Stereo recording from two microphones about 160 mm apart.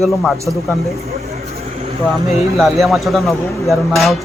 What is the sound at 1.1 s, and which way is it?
Vehicle, 40° right (ahead or behind).